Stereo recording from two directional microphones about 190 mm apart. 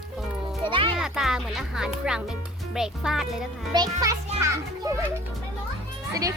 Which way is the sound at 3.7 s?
20° right (ahead or behind).